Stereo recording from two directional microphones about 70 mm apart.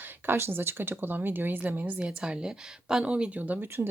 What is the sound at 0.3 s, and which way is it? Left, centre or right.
A woman's voice, right.